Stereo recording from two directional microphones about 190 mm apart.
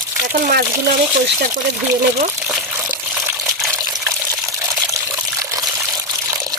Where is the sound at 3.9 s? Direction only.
15° right (ahead or behind).